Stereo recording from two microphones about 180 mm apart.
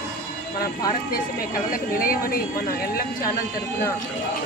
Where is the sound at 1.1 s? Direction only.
50° left (ahead or behind).